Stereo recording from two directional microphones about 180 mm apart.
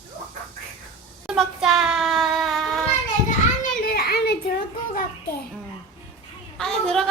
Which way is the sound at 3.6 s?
55° left (ahead or behind).